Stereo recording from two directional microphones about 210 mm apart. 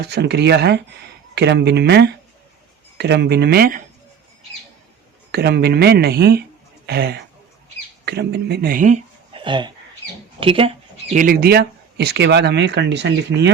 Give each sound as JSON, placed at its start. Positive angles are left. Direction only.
{"t": 0.0, "sound": "speech", "side_deg": -50}
{"t": 5.3, "sound": "speech", "side_deg": -50}
{"t": 9.3, "sound": "a sound", "side_deg": -20}
{"t": 10.4, "sound": "speech", "side_deg": -25}
{"t": 11.1, "sound": "speech", "side_deg": -40}